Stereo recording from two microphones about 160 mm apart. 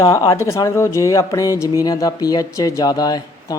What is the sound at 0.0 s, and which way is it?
Speech, 20° left (ahead or behind).